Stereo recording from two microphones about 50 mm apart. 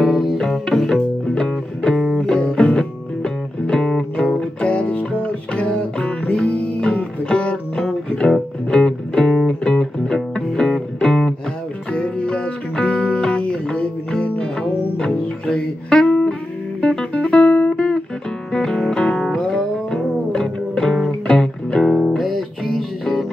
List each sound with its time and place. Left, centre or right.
0.0 s music: centre
0.4 s music: centre
21.8 s music: centre